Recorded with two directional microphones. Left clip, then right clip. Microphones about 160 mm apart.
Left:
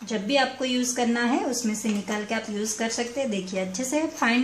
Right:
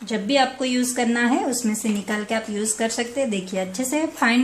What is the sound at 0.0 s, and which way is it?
A woman's voice, 25° right (ahead or behind).